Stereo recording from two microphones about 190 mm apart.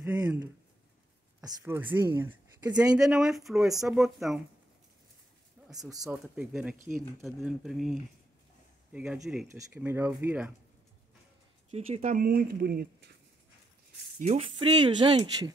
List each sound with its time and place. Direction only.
0.0 s a sound: 10° right (ahead or behind)
1.6 s speech: 10° right (ahead or behind)
6.0 s speech: centre (ahead or behind)
11.7 s speech: 35° right (ahead or behind); by 13.1 s 55° right (ahead or behind)
14.2 s speech: 35° right (ahead or behind)